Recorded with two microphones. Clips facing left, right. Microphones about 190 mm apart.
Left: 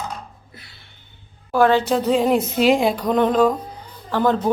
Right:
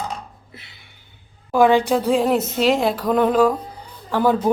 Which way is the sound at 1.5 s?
15° right (ahead or behind).